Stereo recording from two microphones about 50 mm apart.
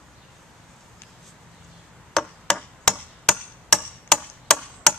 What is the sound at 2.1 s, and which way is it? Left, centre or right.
Chop, centre.